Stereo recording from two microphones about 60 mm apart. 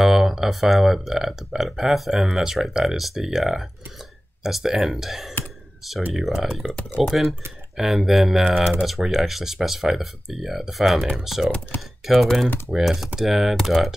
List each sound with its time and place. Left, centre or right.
0.0 s speech: centre
11.7 s speech: left
12.1 s speech: centre